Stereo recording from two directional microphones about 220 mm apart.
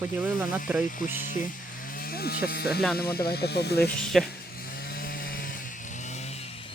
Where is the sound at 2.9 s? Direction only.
45° left (ahead or behind).